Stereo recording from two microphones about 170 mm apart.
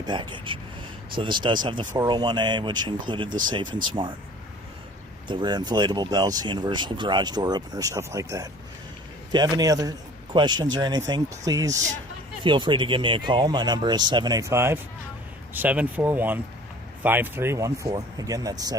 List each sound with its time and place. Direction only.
0.0 s speech: 25° right (ahead or behind)
3.2 s speech: 50° right (ahead or behind)
5.3 s speech: 25° right (ahead or behind)